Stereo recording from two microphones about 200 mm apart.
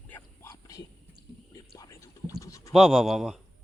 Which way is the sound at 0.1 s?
15° left (ahead or behind).